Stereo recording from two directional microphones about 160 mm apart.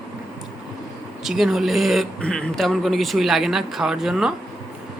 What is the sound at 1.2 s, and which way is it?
Speech, centre (ahead or behind).